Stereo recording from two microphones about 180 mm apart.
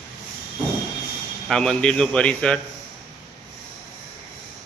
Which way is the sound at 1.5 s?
5° left (ahead or behind).